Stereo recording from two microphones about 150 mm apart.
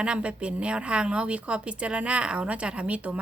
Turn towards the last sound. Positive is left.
turn(degrees=-10)  # may be behind; listen again after turning